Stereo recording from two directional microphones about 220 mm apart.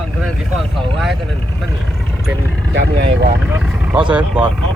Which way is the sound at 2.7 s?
55° right (ahead or behind).